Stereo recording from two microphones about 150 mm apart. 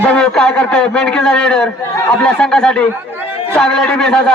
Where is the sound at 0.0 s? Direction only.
5° left (ahead or behind).